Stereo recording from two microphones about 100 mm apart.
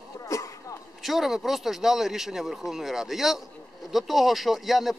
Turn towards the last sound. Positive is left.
turn(degrees=0)  # may be behind; listen again after turning